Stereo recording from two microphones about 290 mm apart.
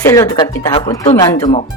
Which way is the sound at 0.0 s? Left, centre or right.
Centre.